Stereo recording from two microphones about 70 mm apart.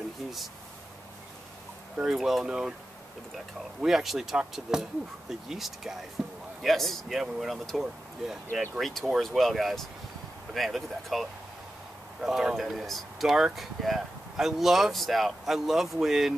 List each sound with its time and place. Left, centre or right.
2.0 s speech: centre
3.8 s speech: centre
6.2 s a sound: centre
6.6 s speech: centre